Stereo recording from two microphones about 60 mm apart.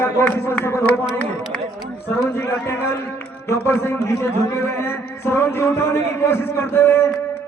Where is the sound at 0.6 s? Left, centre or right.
Left.